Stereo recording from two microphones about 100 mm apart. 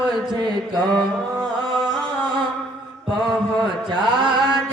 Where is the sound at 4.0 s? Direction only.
50° right (ahead or behind).